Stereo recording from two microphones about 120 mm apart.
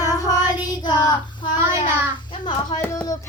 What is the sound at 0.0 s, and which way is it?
Child singing, 30° left (ahead or behind).